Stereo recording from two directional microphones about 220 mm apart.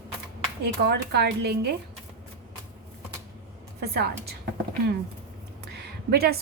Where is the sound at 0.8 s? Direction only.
50° right (ahead or behind).